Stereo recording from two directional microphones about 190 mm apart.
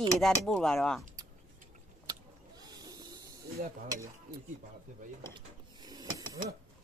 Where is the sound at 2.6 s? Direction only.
20° right (ahead or behind).